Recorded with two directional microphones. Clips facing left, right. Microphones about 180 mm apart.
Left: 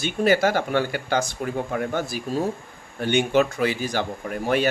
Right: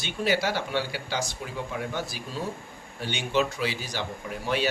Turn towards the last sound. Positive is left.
turn(degrees=50)  # may be behind; listen again after turning